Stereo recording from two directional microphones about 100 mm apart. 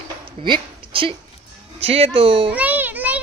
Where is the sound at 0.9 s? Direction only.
65° right (ahead or behind).